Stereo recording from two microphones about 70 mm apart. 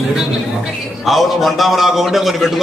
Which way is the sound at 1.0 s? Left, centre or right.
Centre.